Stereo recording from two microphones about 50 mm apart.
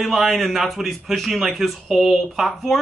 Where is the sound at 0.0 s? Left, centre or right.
Centre.